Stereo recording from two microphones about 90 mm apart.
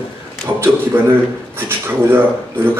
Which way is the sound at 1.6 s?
25° right (ahead or behind).